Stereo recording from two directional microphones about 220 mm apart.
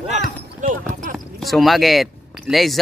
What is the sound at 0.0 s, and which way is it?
Basketball bounce, 30° right (ahead or behind).